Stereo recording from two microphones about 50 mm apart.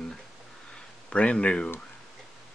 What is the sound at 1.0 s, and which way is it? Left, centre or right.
Speech, left.